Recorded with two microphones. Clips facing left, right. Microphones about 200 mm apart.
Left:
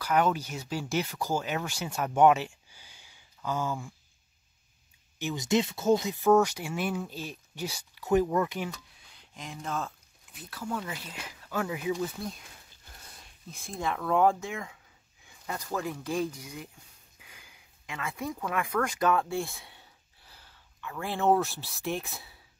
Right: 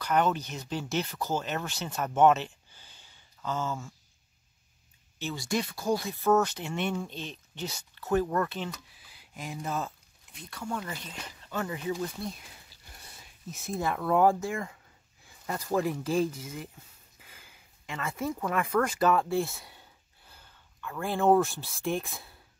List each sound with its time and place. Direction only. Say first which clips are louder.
0.0 s speech: even; 5° left (ahead or behind)
5.2 s speech: left 4 dB; 20° left (ahead or behind)
8.7 s speech: right 1 dB; 5° right (ahead or behind)